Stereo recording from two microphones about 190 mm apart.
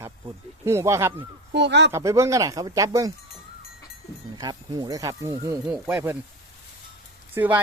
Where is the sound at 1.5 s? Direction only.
65° right (ahead or behind).